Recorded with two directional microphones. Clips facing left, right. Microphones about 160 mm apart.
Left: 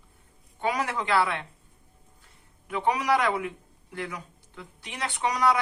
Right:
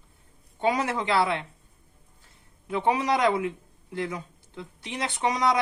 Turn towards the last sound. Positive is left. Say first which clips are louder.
# right 1 dB
turn(degrees=-25)  # may be behind; listen again after turning